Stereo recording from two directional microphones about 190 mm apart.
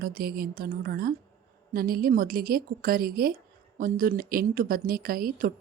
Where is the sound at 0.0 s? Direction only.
50° right (ahead or behind).